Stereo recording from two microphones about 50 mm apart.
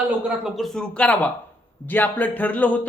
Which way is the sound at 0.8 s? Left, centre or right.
Left.